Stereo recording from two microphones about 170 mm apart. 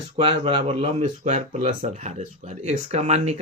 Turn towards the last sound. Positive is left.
turn(degrees=-40)  # may be behind; listen again after turning